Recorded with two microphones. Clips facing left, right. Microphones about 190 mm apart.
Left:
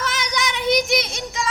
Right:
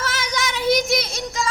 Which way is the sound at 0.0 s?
Centre (ahead or behind).